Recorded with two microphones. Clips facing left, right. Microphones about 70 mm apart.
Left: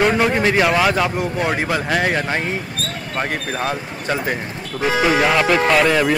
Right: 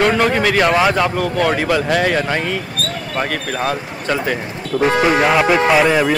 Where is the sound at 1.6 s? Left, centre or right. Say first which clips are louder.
Right 3 dB; left.